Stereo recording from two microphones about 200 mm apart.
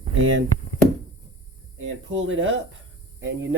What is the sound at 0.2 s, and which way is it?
Speech, 80° right.